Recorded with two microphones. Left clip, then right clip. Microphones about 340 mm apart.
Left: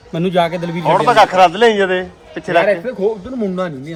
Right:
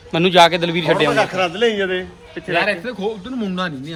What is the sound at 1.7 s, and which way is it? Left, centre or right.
Speech, left.